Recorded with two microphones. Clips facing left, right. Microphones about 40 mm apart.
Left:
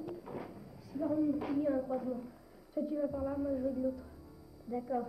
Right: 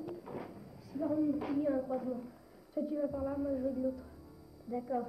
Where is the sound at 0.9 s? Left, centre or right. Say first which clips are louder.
Even; centre.